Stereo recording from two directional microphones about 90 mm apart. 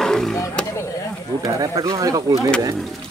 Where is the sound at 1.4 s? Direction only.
40° right (ahead or behind).